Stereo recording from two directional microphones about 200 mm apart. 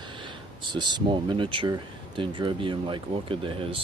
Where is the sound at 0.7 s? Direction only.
20° right (ahead or behind).